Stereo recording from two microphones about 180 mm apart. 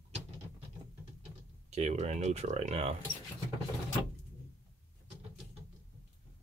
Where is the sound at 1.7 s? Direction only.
35° right (ahead or behind).